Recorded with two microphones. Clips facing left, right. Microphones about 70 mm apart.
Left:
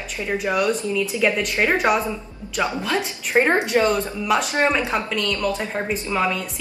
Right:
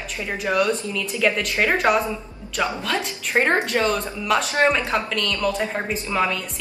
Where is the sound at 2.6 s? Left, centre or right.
Centre.